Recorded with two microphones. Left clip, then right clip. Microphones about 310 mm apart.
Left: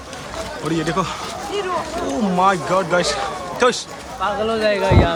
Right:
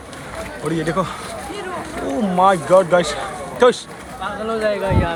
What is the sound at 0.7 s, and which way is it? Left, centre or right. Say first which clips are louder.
Speech: even; centre.